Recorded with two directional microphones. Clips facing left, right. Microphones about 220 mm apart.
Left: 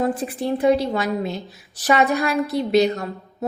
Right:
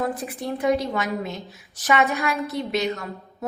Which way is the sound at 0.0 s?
30° left (ahead or behind).